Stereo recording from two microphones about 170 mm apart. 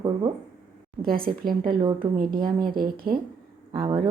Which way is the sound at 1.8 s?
25° right (ahead or behind).